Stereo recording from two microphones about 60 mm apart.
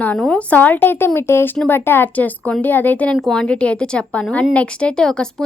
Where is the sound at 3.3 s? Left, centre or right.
Centre.